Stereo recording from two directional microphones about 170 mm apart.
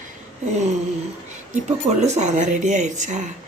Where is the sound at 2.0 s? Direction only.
45° right (ahead or behind).